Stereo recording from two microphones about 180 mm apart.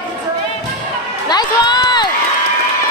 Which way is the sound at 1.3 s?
25° left (ahead or behind).